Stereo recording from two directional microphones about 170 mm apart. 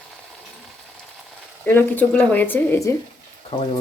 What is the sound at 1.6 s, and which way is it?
A woman's voice, 10° left (ahead or behind).